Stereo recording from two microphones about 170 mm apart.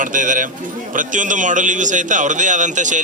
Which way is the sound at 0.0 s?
50° right (ahead or behind).